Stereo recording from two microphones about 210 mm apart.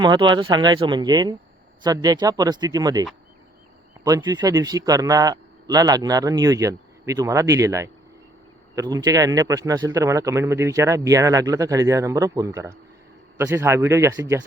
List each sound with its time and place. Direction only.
0.0 s a man's voice: 20° right (ahead or behind)